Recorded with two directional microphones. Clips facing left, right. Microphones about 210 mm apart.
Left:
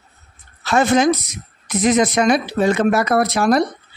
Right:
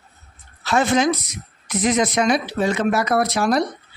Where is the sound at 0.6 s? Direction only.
50° left (ahead or behind).